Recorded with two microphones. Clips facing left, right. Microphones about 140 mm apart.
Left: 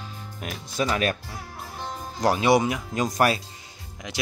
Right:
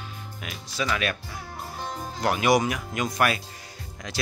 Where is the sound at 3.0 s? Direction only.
35° left (ahead or behind).